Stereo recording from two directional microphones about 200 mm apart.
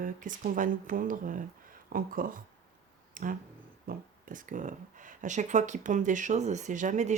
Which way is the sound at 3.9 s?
40° right (ahead or behind).